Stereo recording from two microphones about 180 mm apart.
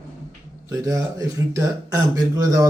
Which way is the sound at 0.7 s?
20° right (ahead or behind).